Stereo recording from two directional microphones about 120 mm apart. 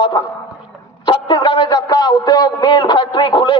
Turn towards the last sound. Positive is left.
turn(degrees=40)  # may be behind; listen again after turning